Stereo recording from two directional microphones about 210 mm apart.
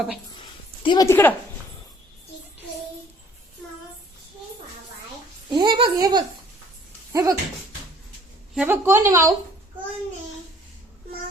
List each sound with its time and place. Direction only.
0.8 s a woman's voice: 20° left (ahead or behind)
5.5 s speech: 20° right (ahead or behind)
8.5 s a woman's voice: 10° right (ahead or behind)